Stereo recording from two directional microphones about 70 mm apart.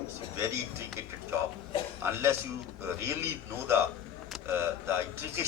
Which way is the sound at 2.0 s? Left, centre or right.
Right.